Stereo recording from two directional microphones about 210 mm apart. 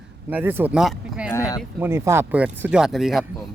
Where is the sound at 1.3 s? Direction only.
15° left (ahead or behind).